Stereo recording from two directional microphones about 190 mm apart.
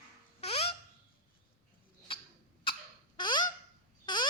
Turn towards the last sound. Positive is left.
turn(degrees=25)  # may be behind; listen again after turning